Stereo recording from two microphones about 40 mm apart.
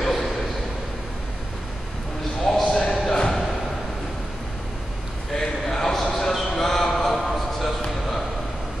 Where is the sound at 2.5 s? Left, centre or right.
Centre.